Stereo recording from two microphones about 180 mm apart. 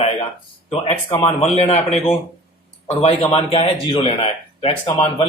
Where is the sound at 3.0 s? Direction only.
35° left (ahead or behind).